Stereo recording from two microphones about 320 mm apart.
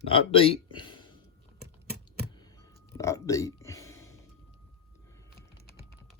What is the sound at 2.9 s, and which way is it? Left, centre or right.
Speech, centre.